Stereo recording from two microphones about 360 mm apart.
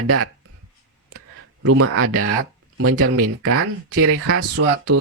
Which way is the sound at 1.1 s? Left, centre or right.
Right.